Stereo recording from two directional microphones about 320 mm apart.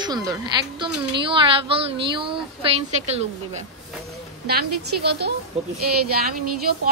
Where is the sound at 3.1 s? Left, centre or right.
Centre.